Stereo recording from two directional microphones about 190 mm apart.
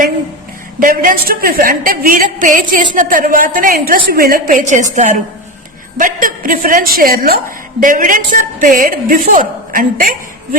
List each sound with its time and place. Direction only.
0.8 s a woman's voice: 45° right (ahead or behind)